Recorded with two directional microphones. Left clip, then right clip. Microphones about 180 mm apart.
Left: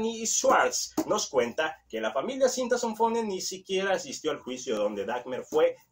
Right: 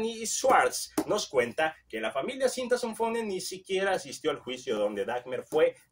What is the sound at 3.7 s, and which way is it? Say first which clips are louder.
Speech: even; 25° right (ahead or behind).